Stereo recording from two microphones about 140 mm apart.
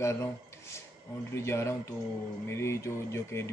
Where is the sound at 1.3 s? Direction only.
20° left (ahead or behind).